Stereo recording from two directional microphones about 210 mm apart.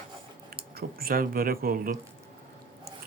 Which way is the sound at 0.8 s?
45° right (ahead or behind).